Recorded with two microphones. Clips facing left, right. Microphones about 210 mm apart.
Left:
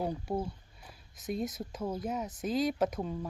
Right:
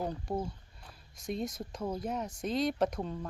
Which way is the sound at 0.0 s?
5° left (ahead or behind).